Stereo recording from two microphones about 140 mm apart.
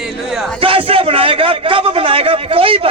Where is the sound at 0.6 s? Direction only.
40° right (ahead or behind).